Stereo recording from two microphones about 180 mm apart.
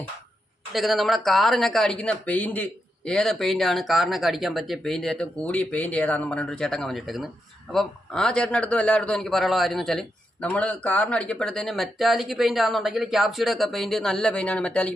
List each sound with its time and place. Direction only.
0.7 s a man's voice: centre (ahead or behind)